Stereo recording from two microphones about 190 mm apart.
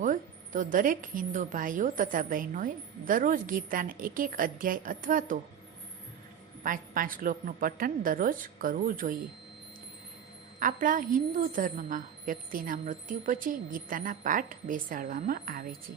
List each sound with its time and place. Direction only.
0.0 s a woman's voice: 45° right (ahead or behind)
6.6 s a woman's voice: 45° right (ahead or behind)
10.6 s a woman's voice: 45° right (ahead or behind)